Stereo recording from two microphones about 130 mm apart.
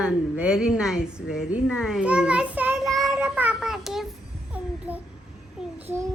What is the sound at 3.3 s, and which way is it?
Child singing, 10° right (ahead or behind).